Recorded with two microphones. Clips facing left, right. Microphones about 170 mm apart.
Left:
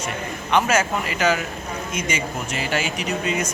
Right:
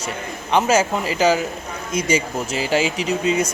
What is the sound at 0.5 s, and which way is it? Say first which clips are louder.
Speech: right 3 dB; 30° right (ahead or behind).